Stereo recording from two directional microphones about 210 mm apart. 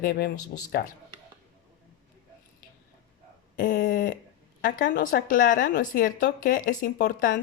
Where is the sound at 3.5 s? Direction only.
40° left (ahead or behind).